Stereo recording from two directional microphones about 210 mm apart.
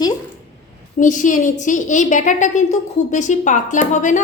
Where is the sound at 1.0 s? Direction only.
35° left (ahead or behind).